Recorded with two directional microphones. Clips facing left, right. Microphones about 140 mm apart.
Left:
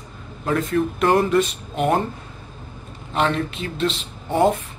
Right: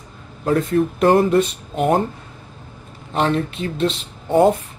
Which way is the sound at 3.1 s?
35° right (ahead or behind).